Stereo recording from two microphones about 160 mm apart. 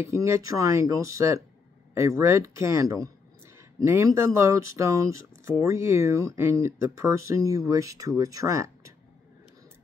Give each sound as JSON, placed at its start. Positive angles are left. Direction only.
{"t": 0.0, "sound": "speech", "side_deg": -15}